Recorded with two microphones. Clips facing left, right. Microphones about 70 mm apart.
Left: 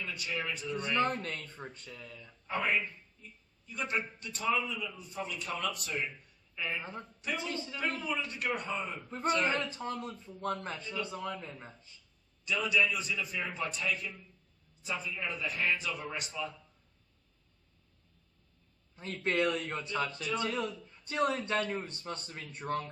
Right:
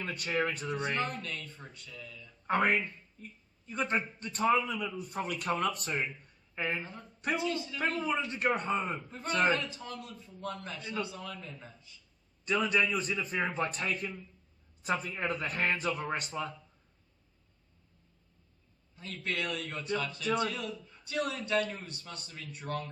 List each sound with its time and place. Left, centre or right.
0.0 s a man's voice: right
0.9 s a man's voice: left
2.5 s a man's voice: right
3.7 s a man's voice: right
7.3 s speech: left
7.8 s a man's voice: right
9.6 s a man's voice: left
12.5 s a man's voice: right
18.9 s a man's voice: left